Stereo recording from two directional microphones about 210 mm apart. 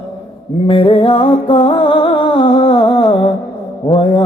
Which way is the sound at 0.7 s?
25° left (ahead or behind).